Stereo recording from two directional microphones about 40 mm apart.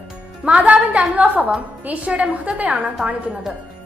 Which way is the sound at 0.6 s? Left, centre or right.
Right.